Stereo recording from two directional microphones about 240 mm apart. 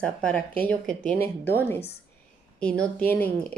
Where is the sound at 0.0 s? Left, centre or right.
Centre.